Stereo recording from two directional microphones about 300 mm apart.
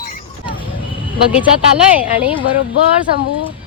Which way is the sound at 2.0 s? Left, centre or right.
Centre.